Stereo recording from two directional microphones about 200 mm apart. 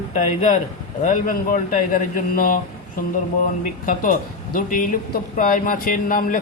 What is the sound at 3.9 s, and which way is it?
Speech, 45° left (ahead or behind).